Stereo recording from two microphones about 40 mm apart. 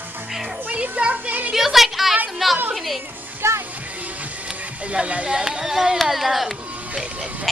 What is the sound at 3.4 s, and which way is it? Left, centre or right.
Music, right.